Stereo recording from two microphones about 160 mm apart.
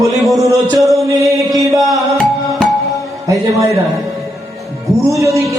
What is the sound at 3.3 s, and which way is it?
Speech, 20° right (ahead or behind).